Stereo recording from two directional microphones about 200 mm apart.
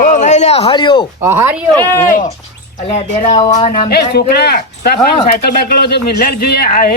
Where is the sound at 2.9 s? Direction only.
35° left (ahead or behind).